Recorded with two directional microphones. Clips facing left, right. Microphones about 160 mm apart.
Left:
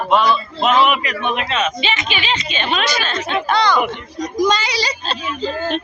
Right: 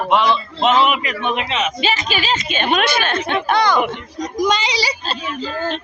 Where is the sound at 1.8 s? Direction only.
40° right (ahead or behind); by 3.6 s 60° right (ahead or behind).